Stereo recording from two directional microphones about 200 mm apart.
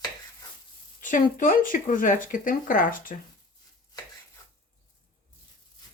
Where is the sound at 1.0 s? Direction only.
40° left (ahead or behind).